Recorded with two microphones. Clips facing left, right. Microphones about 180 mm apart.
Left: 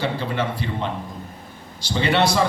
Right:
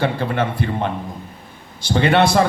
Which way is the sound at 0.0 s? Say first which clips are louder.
Right 4 dB; 55° right (ahead or behind).